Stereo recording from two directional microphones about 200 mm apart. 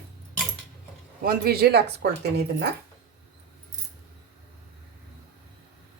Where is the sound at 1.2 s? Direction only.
50° right (ahead or behind).